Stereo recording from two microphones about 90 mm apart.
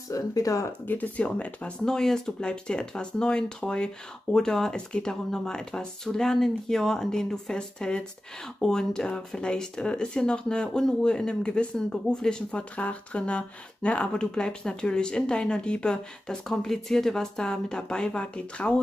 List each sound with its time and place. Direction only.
0.1 s speech: 40° left (ahead or behind)
0.8 s speech: 20° left (ahead or behind)